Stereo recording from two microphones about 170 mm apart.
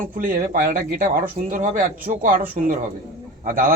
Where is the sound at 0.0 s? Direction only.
55° right (ahead or behind).